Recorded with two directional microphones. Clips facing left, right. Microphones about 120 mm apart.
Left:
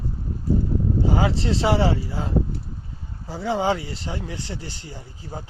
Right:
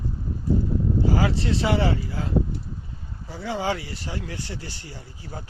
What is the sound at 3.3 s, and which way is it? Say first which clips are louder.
Speech: left 4 dB; 30° left (ahead or behind).